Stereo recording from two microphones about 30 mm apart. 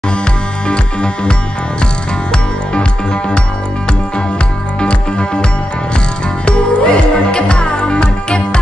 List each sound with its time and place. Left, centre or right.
0.7 s music: left
2.3 s music: left
4.7 s music: left